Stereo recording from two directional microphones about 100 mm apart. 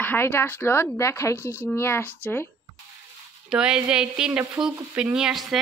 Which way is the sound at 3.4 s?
10° right (ahead or behind).